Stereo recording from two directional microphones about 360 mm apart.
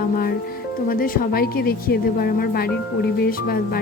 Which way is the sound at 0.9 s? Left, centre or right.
Left.